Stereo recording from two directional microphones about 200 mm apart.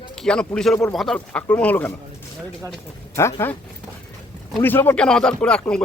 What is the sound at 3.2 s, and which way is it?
Speech, 15° left (ahead or behind).